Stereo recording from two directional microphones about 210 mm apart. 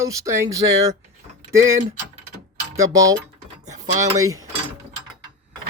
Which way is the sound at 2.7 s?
15° right (ahead or behind).